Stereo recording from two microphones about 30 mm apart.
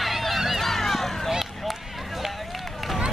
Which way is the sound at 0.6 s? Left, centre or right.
Centre.